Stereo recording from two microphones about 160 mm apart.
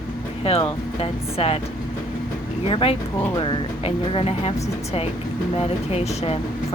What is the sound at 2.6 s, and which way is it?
Speech, 35° left (ahead or behind).